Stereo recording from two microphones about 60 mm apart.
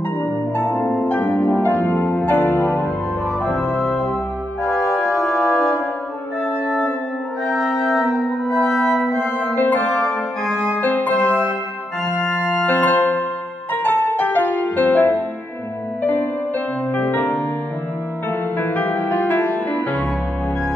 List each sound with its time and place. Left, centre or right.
0.6 s music: left
4.6 s organ: centre
4.9 s organ: centre
5.5 s music: centre
7.4 s organ: centre
8.5 s music: centre
9.6 s music: left
12.2 s organ: left
12.6 s music: left
18.6 s music: left